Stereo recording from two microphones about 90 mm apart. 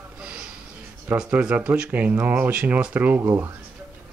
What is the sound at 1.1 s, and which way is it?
Speech, 10° right (ahead or behind).